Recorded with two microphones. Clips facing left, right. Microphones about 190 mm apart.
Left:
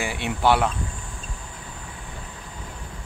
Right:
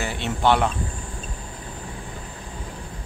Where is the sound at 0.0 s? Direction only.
10° left (ahead or behind).